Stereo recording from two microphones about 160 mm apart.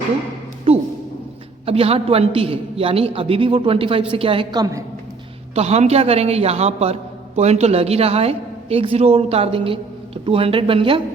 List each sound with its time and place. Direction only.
0.7 s a sound: 40° right (ahead or behind)
1.6 s a man's voice: 40° right (ahead or behind)
5.5 s a man's voice: 40° right (ahead or behind)